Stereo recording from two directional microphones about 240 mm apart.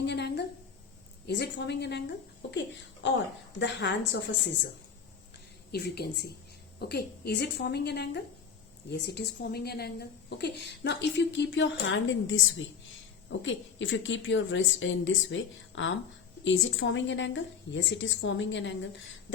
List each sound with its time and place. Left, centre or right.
0.0 s a sound: left
1.3 s a woman's voice: left
5.7 s a woman's voice: left